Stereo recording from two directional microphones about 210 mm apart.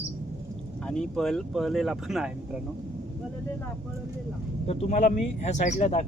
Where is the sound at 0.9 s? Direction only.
5° left (ahead or behind).